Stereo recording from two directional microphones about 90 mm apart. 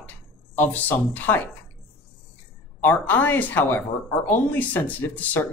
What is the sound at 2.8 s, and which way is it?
Speech, 20° left (ahead or behind).